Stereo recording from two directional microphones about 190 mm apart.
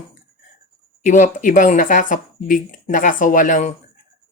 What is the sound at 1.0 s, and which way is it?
Speech, 45° left (ahead or behind).